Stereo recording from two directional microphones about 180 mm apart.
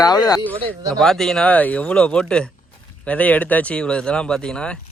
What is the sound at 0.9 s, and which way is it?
Speech, centre (ahead or behind).